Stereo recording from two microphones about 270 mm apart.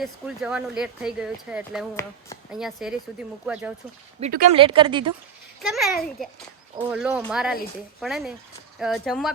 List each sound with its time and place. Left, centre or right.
0.0 s speech: centre
4.2 s speech: right
4.5 s speech: centre
5.6 s speech: centre